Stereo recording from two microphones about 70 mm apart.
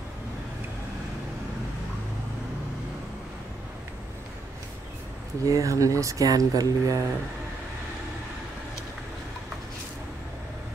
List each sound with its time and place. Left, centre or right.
5.4 s speech: right